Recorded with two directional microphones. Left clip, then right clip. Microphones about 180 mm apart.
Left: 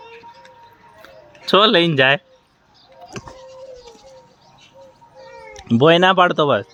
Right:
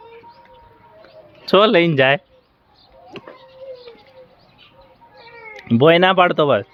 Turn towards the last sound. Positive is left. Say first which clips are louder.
# even
turn(degrees=10)  # may be behind; listen again after turning